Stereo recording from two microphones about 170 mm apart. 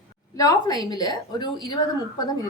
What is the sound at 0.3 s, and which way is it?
A woman's voice, 20° left (ahead or behind).